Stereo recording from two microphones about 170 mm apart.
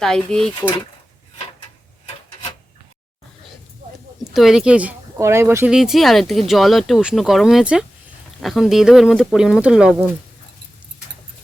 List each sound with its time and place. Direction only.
0.0 s speech: 5° left (ahead or behind)
4.2 s speech: centre (ahead or behind)